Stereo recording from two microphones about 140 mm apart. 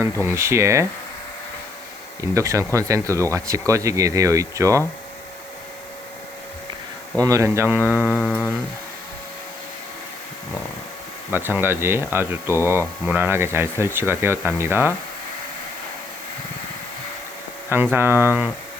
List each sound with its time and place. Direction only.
0.0 s speech: 20° right (ahead or behind)
2.3 s speech: 20° right (ahead or behind)
7.2 s speech: 25° right (ahead or behind)
8.1 s a sound: 10° left (ahead or behind)
11.3 s speech: 15° right (ahead or behind)
17.9 s speech: 15° right (ahead or behind)